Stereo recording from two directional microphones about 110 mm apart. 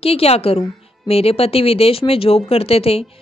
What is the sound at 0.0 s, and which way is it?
A woman's voice, 65° left (ahead or behind).